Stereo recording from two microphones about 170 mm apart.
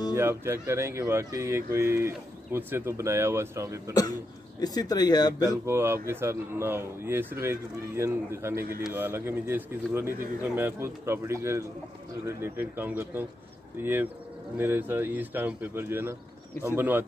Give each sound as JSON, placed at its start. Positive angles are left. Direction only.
{"t": 0.1, "sound": "speech", "side_deg": -15}
{"t": 4.6, "sound": "speech", "side_deg": 20}
{"t": 5.4, "sound": "speech", "side_deg": -15}
{"t": 8.5, "sound": "speech", "side_deg": -60}
{"t": 8.8, "sound": "speech", "side_deg": -10}